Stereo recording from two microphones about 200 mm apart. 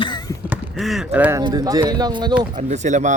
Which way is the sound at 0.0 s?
20° left (ahead or behind).